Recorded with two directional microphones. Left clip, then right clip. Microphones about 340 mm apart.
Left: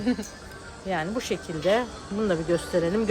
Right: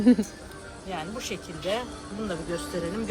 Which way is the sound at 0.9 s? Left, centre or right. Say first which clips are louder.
Left 6 dB; left.